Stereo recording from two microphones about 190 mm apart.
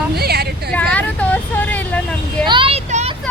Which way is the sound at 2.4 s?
25° right (ahead or behind).